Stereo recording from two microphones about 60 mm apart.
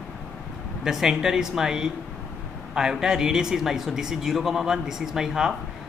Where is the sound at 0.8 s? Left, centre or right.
Centre.